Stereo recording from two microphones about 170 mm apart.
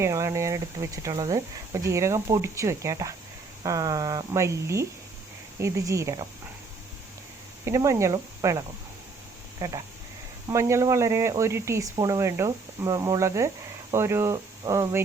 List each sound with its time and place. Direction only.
0.0 s speech: 20° right (ahead or behind)
7.6 s speech: 20° right (ahead or behind)